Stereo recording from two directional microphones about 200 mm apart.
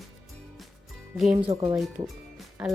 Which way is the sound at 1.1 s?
Centre (ahead or behind).